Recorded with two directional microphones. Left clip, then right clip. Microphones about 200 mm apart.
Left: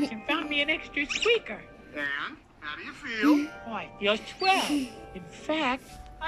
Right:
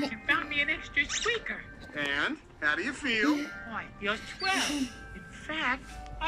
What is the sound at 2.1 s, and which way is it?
Speech, 35° right (ahead or behind).